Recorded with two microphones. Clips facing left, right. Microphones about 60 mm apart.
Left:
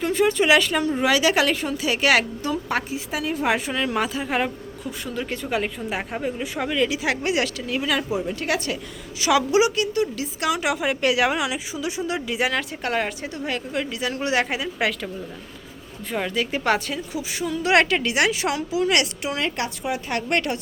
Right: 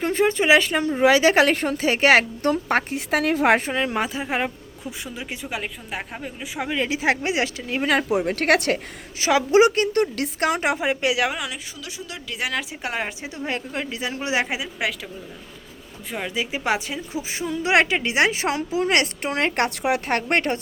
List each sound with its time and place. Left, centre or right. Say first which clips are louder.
0.0 s a woman's voice: even; right
2.4 s a woman's voice: right 4 dB; right
3.7 s speech: even; right; by 6.5 s centre
6.7 s a woman's voice: right 1 dB; right
7.8 s a woman's voice: right 3 dB; right
8.1 s a woman's voice: right 5 dB; right
9.2 s a woman's voice: right 2 dB; right
11.0 s speech: left 2 dB; centre
11.8 s a woman's voice: left 9 dB; left
12.3 s speech: right 1 dB; centre
16.1 s speech: left 2 dB; centre
17.1 s a woman's voice: even; right